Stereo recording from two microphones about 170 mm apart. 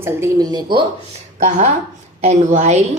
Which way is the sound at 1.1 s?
45° right (ahead or behind).